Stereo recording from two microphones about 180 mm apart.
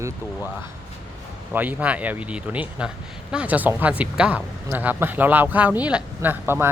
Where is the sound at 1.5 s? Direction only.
10° right (ahead or behind).